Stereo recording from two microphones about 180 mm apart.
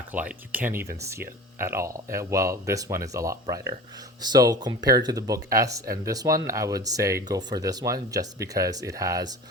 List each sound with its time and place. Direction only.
0.1 s speech: 10° right (ahead or behind)